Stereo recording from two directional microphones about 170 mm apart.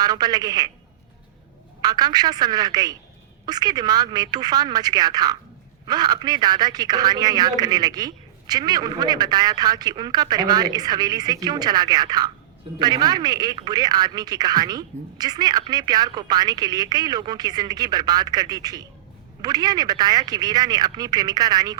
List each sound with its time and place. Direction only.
0.0 s a man's voice: 25° right (ahead or behind)
1.8 s a man's voice: 25° right (ahead or behind)